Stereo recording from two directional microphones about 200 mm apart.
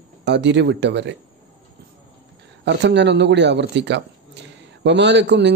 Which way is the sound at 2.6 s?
60° right (ahead or behind).